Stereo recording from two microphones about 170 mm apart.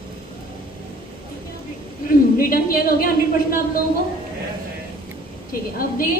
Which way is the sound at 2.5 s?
55° left (ahead or behind).